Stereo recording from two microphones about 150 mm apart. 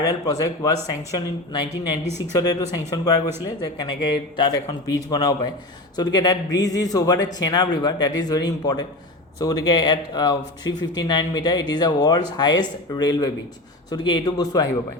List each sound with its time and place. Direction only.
0.0 s speech: 20° left (ahead or behind)